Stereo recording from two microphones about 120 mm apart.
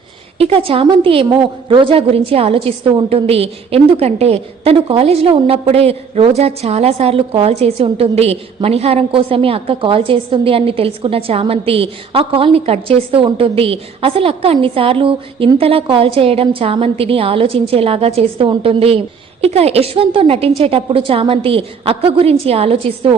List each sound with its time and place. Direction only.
0.3 s a woman's voice: 55° right (ahead or behind)